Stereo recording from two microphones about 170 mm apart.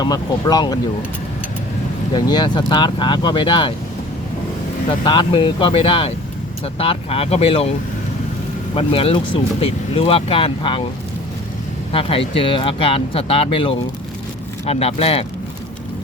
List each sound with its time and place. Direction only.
0.0 s speech: 20° left (ahead or behind)
2.1 s speech: 25° left (ahead or behind)
4.9 s speech: 30° left (ahead or behind)
8.7 s speech: 35° left (ahead or behind)
11.9 s speech: 35° left (ahead or behind)